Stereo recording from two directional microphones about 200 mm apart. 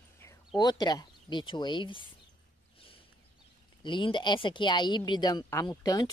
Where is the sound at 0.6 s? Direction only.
20° left (ahead or behind).